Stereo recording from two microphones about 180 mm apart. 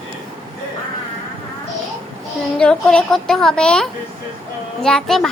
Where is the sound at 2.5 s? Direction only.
5° left (ahead or behind).